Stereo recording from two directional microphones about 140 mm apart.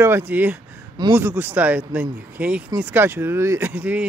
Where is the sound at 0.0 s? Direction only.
15° right (ahead or behind).